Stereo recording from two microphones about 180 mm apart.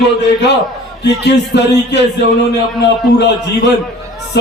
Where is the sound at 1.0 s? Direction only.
70° left (ahead or behind).